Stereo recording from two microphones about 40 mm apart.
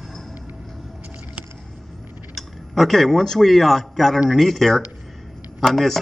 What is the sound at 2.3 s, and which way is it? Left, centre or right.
A man's voice, centre.